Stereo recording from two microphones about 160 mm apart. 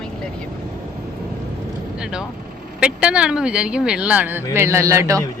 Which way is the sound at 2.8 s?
5° right (ahead or behind).